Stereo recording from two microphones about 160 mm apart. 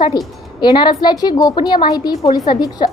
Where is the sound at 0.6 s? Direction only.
30° left (ahead or behind).